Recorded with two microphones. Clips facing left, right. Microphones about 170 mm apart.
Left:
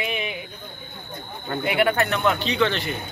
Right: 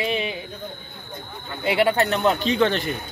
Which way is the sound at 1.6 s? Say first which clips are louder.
Right 2 dB; 25° right (ahead or behind).